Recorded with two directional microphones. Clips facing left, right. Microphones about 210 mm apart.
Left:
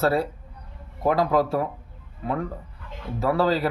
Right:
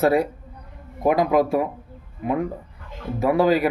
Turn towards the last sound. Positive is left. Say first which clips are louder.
# right 4 dB
turn(degrees=-15)  # may be behind; listen again after turning